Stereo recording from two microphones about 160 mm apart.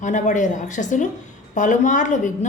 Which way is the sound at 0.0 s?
50° left (ahead or behind).